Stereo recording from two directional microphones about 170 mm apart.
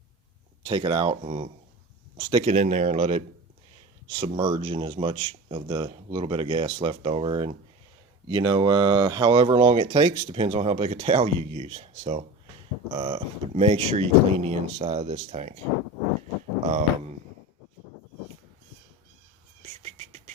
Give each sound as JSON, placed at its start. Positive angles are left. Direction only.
{"t": 0.6, "sound": "speech", "side_deg": -30}
{"t": 4.1, "sound": "speech", "side_deg": -30}
{"t": 16.7, "sound": "speech", "side_deg": -40}
{"t": 19.8, "sound": "whispering", "side_deg": -40}